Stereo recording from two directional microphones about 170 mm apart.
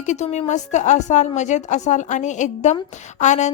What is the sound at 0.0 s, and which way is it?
A woman's voice, 45° left (ahead or behind).